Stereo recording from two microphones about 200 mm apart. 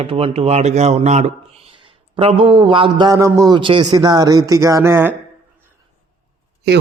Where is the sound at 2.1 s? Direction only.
25° right (ahead or behind); by 5.1 s 10° right (ahead or behind).